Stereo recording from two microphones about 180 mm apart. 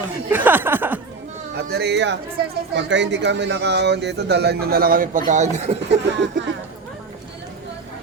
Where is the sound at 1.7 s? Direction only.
65° right (ahead or behind); by 5.8 s 40° right (ahead or behind).